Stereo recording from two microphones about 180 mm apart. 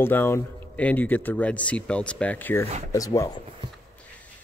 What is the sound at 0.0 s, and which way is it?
Speech, 10° left (ahead or behind).